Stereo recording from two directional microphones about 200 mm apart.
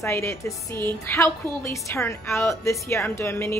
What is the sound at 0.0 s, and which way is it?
A woman's voice, 15° left (ahead or behind).